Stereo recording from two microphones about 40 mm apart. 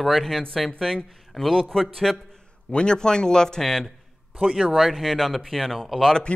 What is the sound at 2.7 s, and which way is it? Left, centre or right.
A man's voice, left.